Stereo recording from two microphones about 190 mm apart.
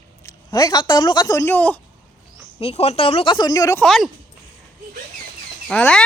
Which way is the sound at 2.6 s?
30° left (ahead or behind).